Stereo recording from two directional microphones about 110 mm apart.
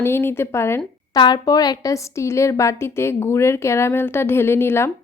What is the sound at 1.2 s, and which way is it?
A woman's voice, 40° left (ahead or behind).